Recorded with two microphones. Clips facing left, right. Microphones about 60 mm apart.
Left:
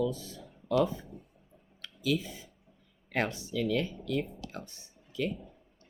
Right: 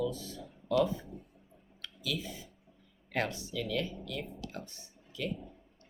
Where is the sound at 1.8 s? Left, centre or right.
Left.